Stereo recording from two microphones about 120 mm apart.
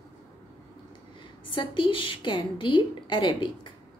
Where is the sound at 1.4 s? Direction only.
45° left (ahead or behind).